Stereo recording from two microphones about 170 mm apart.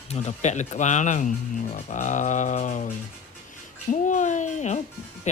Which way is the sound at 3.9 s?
45° left (ahead or behind).